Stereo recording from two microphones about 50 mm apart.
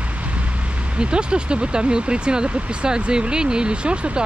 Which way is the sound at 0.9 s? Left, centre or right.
Centre.